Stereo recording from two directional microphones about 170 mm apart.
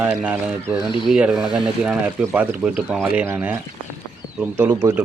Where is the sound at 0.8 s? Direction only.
30° left (ahead or behind).